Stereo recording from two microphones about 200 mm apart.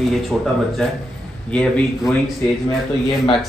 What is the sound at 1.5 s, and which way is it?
Speech, 5° left (ahead or behind).